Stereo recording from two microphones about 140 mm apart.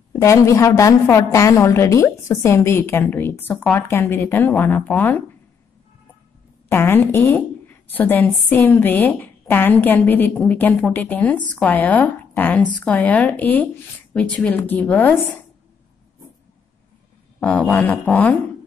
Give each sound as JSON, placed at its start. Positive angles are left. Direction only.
{"t": 0.1, "sound": "a woman's voice", "side_deg": 20}
{"t": 6.7, "sound": "a woman's voice", "side_deg": 15}
{"t": 17.4, "sound": "a woman's voice", "side_deg": 10}